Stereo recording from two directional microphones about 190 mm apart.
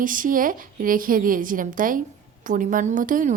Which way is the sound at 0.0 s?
45° right (ahead or behind).